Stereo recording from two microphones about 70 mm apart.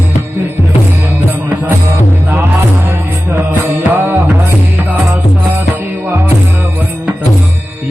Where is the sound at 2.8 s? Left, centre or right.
Right.